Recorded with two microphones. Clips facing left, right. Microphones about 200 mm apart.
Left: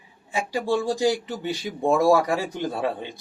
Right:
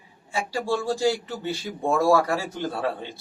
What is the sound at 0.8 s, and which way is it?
Speech, 15° left (ahead or behind).